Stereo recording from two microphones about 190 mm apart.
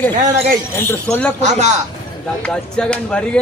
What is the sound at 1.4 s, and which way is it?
Speech, 35° right (ahead or behind).